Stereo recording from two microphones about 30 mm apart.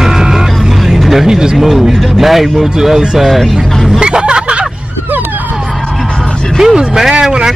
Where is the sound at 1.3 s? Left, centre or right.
Right.